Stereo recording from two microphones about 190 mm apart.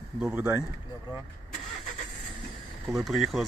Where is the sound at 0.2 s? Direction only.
5° right (ahead or behind).